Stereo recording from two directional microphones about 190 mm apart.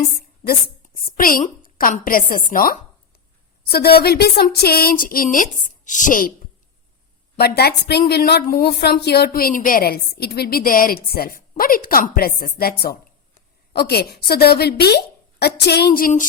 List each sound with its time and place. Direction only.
0.1 s a sound: 55° left (ahead or behind)
0.9 s a woman's voice: 45° left (ahead or behind)
7.3 s a woman's voice: 55° left (ahead or behind)